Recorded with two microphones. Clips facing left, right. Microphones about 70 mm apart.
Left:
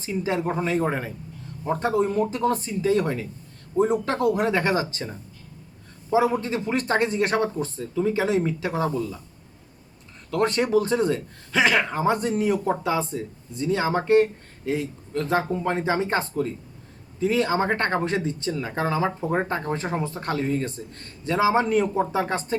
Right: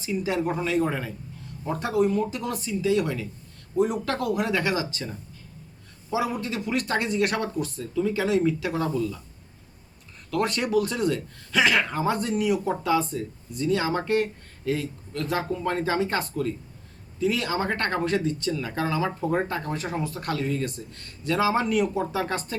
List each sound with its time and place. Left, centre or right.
0.0 s speech: left
6.1 s speech: left
10.3 s speech: left